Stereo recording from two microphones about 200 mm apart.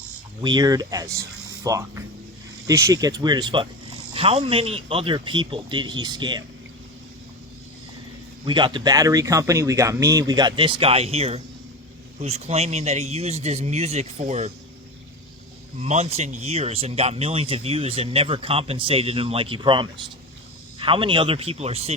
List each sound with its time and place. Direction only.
0.4 s speech: 20° right (ahead or behind)
8.4 s speech: 25° right (ahead or behind)
15.8 s speech: 35° right (ahead or behind)